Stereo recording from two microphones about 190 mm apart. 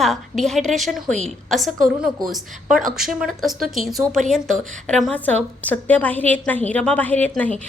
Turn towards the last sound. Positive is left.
turn(degrees=10)  # may be behind; listen again after turning